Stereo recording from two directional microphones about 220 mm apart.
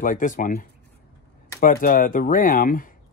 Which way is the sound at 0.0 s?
35° left (ahead or behind).